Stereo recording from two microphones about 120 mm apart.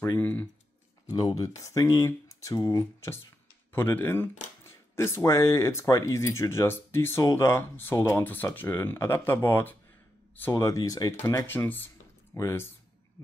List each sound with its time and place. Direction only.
0.2 s speech: 15° left (ahead or behind)
1.1 s speech: 30° left (ahead or behind)
11.2 s speech: 20° left (ahead or behind)